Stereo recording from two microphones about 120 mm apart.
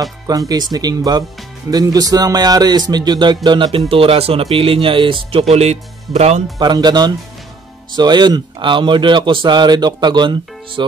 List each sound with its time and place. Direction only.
0.3 s speech: 35° right (ahead or behind)
3.9 s speech: 50° right (ahead or behind)
5.5 s speech: 65° right (ahead or behind)
6.6 s speech: 35° right (ahead or behind)